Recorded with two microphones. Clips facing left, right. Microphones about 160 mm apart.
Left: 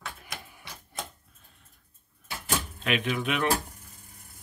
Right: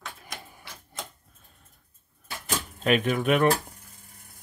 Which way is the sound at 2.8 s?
45° right (ahead or behind).